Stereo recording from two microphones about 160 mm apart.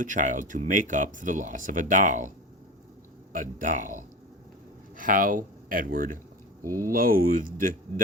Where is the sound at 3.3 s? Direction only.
55° right (ahead or behind).